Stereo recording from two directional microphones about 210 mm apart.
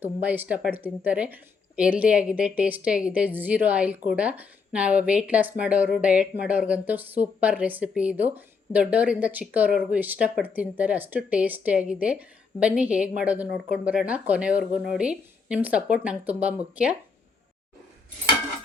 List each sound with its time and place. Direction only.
0.0 s speech: 10° right (ahead or behind)